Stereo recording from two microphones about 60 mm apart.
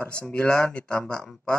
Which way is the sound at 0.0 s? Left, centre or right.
Centre.